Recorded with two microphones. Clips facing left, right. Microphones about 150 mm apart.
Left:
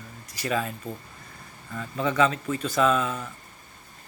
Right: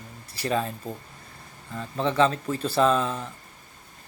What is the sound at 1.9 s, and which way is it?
Speech, 30° right (ahead or behind).